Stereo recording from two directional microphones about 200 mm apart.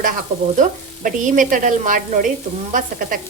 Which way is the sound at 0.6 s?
40° right (ahead or behind).